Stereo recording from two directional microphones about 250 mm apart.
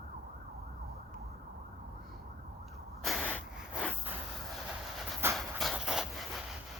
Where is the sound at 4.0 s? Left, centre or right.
Centre.